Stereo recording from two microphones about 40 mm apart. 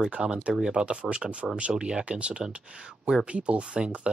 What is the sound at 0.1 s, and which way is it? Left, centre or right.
Speech, right.